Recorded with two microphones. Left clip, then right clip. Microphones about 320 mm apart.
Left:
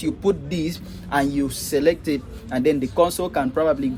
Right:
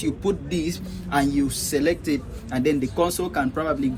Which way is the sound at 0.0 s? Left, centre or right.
Left.